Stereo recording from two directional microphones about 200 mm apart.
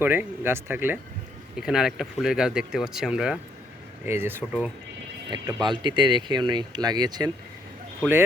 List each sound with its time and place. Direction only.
0.0 s speech: 10° right (ahead or behind)
5.3 s speech: 20° right (ahead or behind)